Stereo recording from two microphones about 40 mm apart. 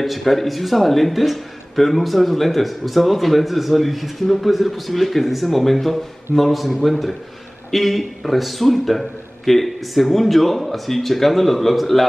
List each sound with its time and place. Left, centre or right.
0.0 s a man's voice: centre